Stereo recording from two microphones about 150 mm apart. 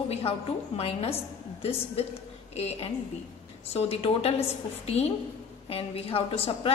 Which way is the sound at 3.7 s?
40° left (ahead or behind).